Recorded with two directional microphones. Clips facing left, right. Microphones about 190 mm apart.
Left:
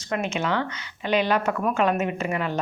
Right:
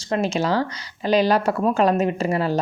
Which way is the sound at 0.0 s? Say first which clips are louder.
Right 5 dB; 35° right (ahead or behind).